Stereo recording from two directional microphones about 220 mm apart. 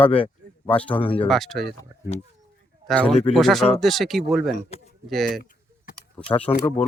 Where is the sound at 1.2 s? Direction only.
Centre (ahead or behind).